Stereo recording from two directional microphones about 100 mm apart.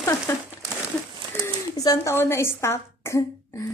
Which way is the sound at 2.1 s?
25° left (ahead or behind).